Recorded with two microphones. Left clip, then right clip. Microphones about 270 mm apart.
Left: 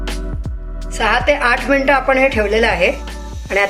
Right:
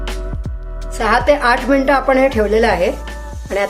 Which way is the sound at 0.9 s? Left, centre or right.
Right.